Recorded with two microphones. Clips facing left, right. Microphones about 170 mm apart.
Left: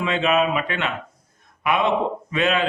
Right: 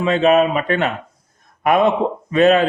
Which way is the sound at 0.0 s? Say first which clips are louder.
Right 6 dB; 40° right (ahead or behind).